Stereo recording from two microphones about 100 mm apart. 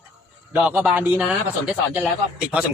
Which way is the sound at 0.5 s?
15° right (ahead or behind).